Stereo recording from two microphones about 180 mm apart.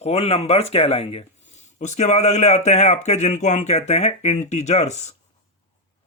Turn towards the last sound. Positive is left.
turn(degrees=40)  # may be behind; listen again after turning